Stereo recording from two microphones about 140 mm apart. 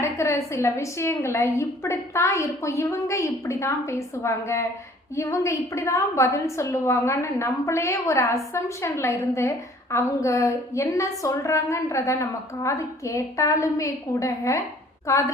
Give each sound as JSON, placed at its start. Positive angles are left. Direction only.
{"t": 0.0, "sound": "a woman's voice", "side_deg": 20}